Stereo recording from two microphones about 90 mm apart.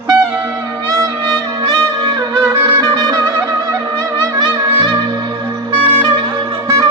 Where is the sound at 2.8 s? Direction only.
50° right (ahead or behind).